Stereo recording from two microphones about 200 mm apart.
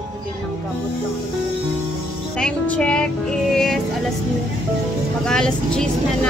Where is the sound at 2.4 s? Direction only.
5° left (ahead or behind).